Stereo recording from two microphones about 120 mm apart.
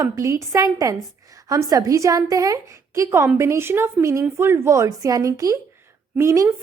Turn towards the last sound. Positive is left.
turn(degrees=-25)  # may be behind; listen again after turning